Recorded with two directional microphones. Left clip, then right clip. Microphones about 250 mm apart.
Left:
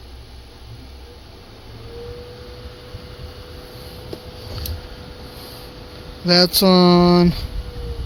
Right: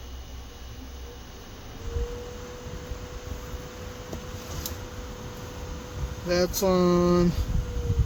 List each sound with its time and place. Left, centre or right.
6.2 s speech: left